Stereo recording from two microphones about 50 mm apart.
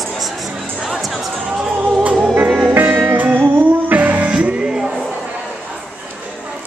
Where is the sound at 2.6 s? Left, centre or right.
Right.